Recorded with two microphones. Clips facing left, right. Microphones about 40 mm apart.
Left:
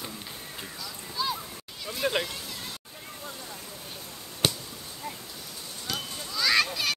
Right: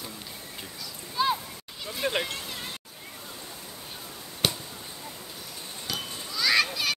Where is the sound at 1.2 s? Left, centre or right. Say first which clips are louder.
Right 5 dB; right.